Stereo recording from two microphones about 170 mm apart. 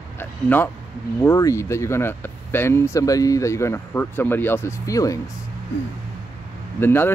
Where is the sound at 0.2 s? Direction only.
10° left (ahead or behind).